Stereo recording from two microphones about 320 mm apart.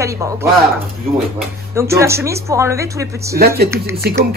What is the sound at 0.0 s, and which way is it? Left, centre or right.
Speech, centre.